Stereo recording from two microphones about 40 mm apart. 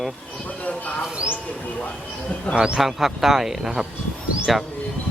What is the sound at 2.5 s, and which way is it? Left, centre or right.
Speech, right.